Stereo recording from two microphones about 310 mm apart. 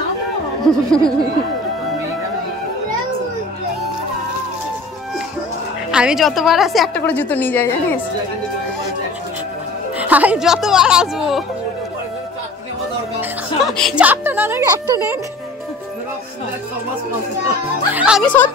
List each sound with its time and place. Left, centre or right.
0.7 s a woman's voice: centre
5.9 s a woman's voice: centre
9.9 s a woman's voice: centre
13.2 s speech: centre
17.9 s a woman's voice: centre